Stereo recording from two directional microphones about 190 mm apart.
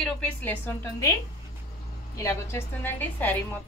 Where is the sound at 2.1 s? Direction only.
15° left (ahead or behind).